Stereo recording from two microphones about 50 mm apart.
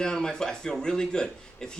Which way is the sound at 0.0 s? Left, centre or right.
Centre.